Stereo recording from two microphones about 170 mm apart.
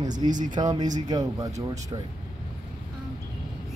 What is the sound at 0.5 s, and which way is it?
A man's voice, 25° right (ahead or behind).